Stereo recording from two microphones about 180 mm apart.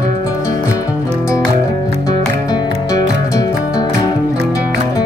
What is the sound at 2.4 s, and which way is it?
Music, 15° left (ahead or behind).